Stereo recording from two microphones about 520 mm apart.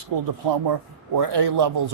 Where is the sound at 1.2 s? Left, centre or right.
Right.